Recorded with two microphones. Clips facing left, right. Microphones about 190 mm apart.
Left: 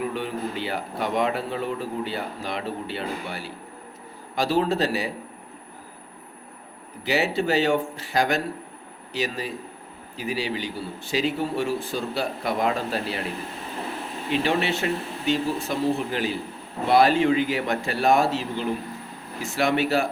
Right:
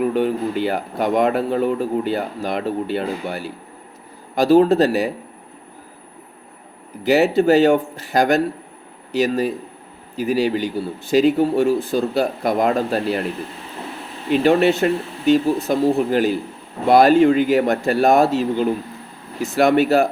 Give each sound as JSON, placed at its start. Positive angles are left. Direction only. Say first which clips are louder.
{"t": 0.0, "sound": "speech", "louder": "right 9 dB", "side_deg": -50}
{"t": 7.0, "sound": "speech", "louder": "right 9 dB", "side_deg": -45}
{"t": 14.4, "sound": "speech", "louder": "right 11 dB", "side_deg": -45}